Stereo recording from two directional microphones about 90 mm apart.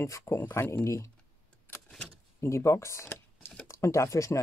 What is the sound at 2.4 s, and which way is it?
Speech, 30° left (ahead or behind).